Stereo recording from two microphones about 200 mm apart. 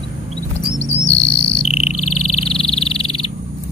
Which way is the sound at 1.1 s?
65° left (ahead or behind).